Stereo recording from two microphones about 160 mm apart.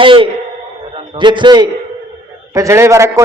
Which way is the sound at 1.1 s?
30° right (ahead or behind).